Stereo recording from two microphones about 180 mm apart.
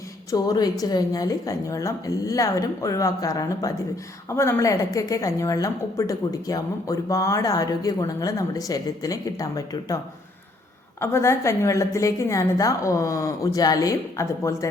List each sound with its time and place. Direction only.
0.3 s a woman's voice: 20° left (ahead or behind)
11.0 s a woman's voice: 15° left (ahead or behind)